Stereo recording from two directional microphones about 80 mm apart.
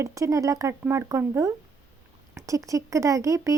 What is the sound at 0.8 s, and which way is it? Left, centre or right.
A woman's voice, right.